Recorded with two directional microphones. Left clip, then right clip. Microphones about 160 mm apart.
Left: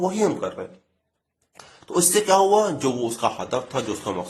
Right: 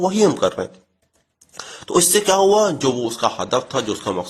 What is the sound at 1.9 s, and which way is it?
A man's voice, 40° right (ahead or behind).